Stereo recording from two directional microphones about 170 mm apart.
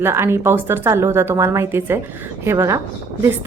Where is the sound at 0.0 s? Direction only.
15° right (ahead or behind).